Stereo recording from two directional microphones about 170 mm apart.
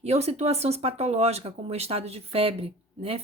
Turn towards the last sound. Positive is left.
turn(degrees=-35)  # may be behind; listen again after turning